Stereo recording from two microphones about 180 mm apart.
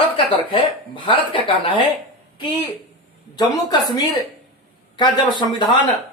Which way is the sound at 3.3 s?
20° left (ahead or behind).